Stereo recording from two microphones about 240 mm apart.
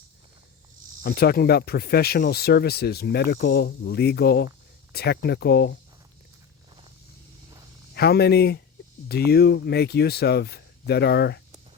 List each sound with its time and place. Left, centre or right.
1.0 s speech: left
7.9 s speech: left